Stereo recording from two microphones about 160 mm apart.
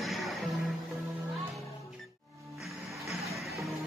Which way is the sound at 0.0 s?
Centre (ahead or behind).